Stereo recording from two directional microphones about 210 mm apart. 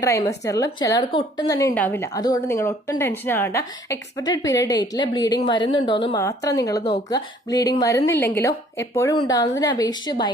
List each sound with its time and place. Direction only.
0.0 s a woman's voice: 15° left (ahead or behind)